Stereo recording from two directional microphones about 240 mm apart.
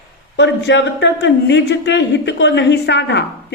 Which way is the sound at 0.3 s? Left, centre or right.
Left.